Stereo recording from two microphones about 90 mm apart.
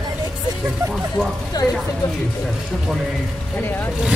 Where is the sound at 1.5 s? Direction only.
45° left (ahead or behind).